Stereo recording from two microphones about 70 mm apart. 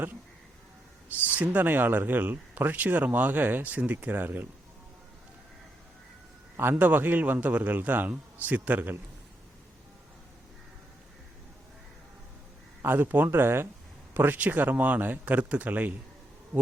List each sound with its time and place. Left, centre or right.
1.0 s speech: right
6.6 s speech: right
12.8 s speech: right